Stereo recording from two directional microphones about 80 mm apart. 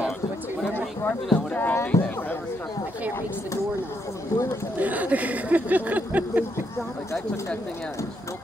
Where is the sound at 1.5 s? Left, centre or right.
Centre.